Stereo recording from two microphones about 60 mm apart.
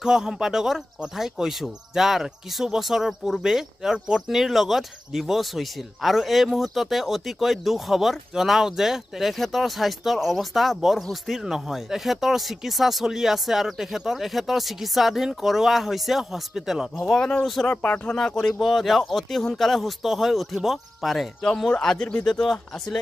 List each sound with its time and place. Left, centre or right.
0.0 s speech: centre
17.0 s speech: centre
18.1 s speech: centre
21.5 s speech: centre
22.2 s speech: centre